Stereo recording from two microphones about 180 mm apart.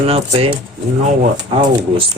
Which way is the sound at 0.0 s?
30° right (ahead or behind).